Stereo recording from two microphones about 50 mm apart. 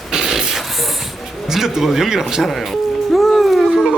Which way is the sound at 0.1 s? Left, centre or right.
Centre.